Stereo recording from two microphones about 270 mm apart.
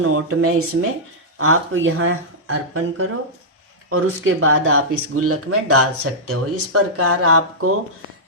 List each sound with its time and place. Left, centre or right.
0.0 s speech: right